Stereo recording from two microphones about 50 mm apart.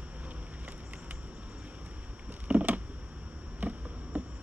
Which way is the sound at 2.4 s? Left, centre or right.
Right.